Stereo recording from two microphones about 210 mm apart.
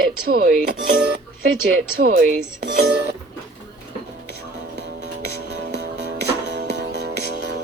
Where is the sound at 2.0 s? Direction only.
50° right (ahead or behind).